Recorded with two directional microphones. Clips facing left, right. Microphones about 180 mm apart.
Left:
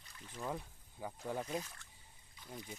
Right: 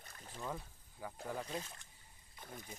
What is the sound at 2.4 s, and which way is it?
Speech, 45° right (ahead or behind).